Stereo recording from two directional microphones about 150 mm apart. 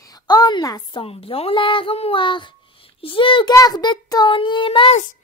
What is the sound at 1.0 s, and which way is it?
A woman's voice, 40° left (ahead or behind).